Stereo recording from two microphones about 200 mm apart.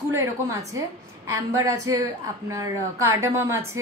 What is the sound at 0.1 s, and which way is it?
A woman's voice, 15° right (ahead or behind).